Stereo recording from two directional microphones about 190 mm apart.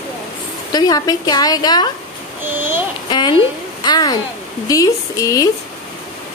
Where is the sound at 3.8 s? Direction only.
20° left (ahead or behind).